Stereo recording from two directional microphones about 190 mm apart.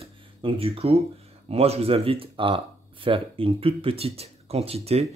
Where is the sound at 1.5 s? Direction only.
30° right (ahead or behind).